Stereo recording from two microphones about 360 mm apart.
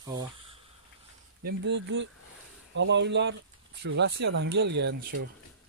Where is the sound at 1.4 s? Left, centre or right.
Right.